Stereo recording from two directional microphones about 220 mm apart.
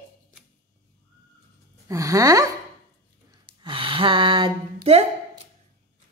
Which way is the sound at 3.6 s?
25° right (ahead or behind).